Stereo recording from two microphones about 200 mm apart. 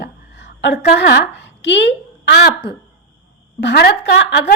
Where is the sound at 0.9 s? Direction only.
60° left (ahead or behind).